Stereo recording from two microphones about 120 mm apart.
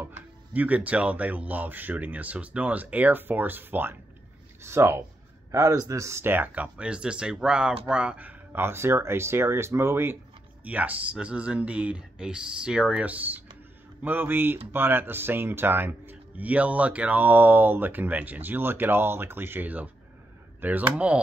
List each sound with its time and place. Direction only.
0.0 s speech: 15° right (ahead or behind)